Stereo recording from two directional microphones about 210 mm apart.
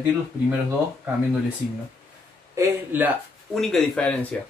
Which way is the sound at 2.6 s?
10° right (ahead or behind).